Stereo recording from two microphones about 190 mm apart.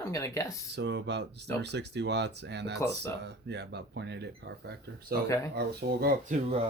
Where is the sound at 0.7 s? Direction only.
70° right (ahead or behind).